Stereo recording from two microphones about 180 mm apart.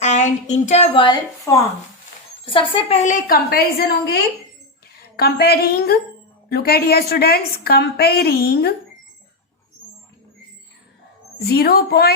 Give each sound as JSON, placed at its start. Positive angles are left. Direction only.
{"t": 0.0, "sound": "a woman's voice", "side_deg": 40}
{"t": 11.4, "sound": "a woman's voice", "side_deg": 60}